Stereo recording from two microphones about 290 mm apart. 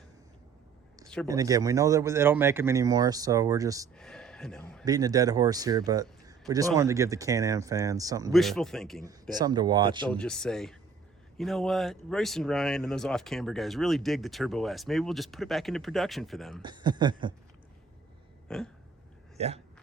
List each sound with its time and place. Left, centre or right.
1.0 s a sound: centre
1.3 s speech: centre
3.9 s speech: centre
4.9 s speech: centre
8.3 s speech: centre
9.4 s speech: centre
10.1 s speech: centre
16.6 s speech: centre
18.4 s a sound: centre
19.4 s speech: right